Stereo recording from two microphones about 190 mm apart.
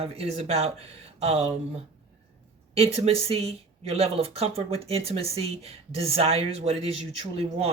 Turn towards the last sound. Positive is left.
turn(degrees=-30)  # may be behind; listen again after turning